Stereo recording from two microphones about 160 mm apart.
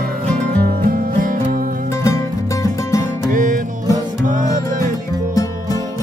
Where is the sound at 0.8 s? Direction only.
60° right (ahead or behind).